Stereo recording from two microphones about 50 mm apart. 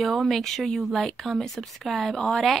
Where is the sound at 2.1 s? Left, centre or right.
Centre.